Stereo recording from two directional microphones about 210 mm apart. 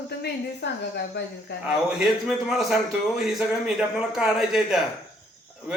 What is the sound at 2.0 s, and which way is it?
A man's voice, centre (ahead or behind).